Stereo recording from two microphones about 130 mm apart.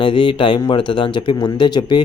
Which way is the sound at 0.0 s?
40° left (ahead or behind).